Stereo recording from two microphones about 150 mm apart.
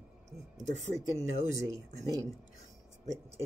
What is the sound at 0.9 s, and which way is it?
Speech, 45° right (ahead or behind).